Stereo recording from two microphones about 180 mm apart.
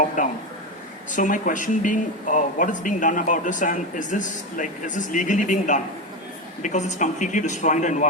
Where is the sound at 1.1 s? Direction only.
45° left (ahead or behind).